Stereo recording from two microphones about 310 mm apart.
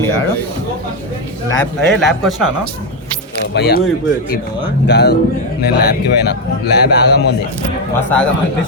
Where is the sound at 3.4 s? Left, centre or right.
Left.